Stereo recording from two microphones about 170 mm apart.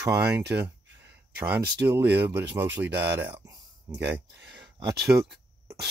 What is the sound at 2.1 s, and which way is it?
Speech, 10° right (ahead or behind).